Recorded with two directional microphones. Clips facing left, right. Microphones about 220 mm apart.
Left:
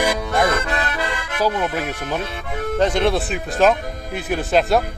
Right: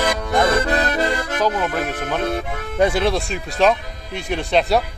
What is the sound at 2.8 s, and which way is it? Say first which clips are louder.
Speech: right 1 dB; 5° right (ahead or behind).